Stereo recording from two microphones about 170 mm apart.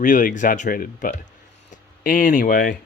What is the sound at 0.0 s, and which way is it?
Speech, 50° left (ahead or behind).